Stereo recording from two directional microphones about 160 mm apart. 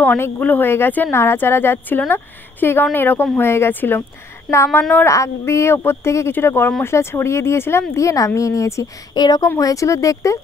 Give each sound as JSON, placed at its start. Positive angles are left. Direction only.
{"t": 0.0, "sound": "speech", "side_deg": 10}
{"t": 5.0, "sound": "a woman's voice", "side_deg": 20}